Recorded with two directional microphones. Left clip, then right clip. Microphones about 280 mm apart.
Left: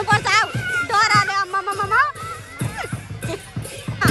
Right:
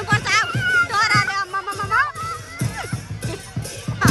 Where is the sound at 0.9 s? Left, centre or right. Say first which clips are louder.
Left 2 dB; centre.